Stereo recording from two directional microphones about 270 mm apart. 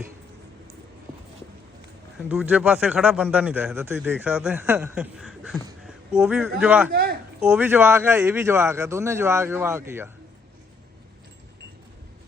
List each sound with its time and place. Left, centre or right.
2.1 s speech: centre
6.9 s speech: right
7.4 s speech: centre